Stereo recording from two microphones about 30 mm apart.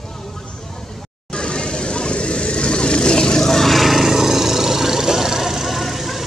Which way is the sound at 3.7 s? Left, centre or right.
Centre.